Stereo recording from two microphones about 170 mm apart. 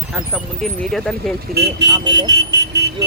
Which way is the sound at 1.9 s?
25° right (ahead or behind).